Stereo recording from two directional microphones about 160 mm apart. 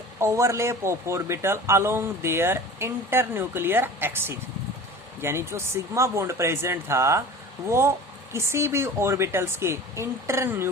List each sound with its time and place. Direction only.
0.2 s speech: 20° right (ahead or behind)